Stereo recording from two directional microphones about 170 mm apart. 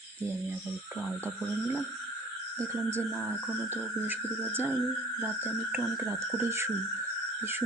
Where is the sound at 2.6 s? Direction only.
15° right (ahead or behind).